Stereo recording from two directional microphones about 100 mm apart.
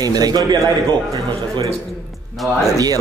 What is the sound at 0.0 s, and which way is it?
Speech, 40° right (ahead or behind).